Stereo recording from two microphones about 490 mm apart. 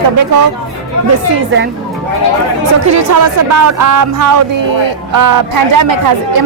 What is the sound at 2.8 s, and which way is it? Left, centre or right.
Speech, right.